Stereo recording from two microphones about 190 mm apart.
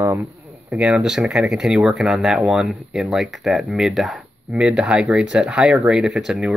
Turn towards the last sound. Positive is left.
turn(degrees=-5)  # may be behind; listen again after turning